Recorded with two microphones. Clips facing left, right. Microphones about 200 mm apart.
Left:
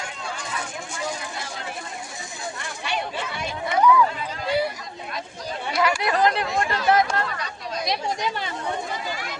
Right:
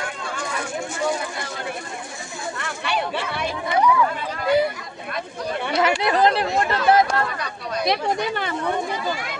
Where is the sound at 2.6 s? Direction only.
60° right (ahead or behind).